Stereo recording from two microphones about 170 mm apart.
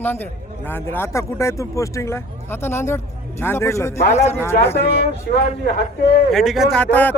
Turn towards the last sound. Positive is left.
turn(degrees=10)  # may be behind; listen again after turning